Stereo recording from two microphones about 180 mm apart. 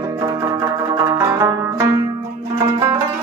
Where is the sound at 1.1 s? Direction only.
15° right (ahead or behind).